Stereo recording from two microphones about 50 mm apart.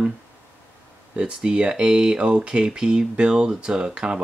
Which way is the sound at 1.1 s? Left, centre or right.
Right.